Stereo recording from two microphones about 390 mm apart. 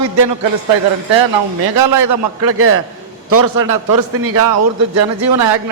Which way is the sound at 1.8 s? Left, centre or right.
Right.